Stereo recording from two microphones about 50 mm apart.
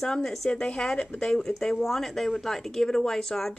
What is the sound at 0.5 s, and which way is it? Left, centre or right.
Speech, left.